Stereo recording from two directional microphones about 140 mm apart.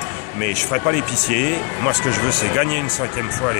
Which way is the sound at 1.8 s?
5° right (ahead or behind).